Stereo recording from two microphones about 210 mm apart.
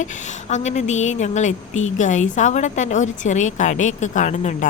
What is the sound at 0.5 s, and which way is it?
A woman's voice, 35° left (ahead or behind).